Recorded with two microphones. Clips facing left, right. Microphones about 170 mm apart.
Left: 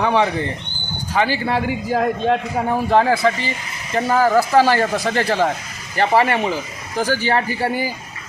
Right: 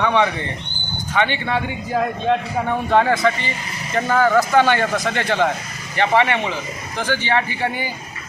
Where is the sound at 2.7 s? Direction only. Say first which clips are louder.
Left 1 dB; 30° left (ahead or behind).